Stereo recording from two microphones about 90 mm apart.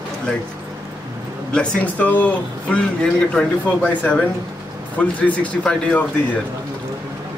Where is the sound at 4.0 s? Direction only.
15° left (ahead or behind).